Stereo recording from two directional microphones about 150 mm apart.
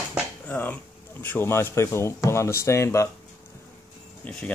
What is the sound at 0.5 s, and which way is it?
Speech, 10° left (ahead or behind).